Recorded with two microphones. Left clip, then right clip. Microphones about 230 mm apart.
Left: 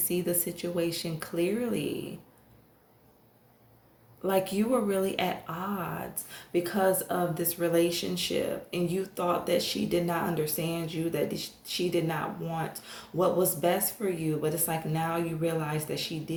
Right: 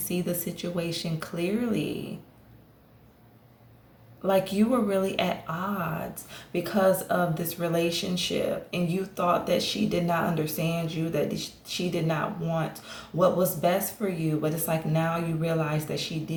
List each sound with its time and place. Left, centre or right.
0.1 s speech: left
4.2 s speech: left